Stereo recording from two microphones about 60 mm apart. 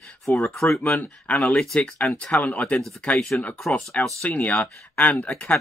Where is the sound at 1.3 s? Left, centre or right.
Left.